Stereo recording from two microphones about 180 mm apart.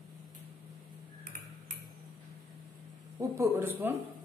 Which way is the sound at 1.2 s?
50° right (ahead or behind).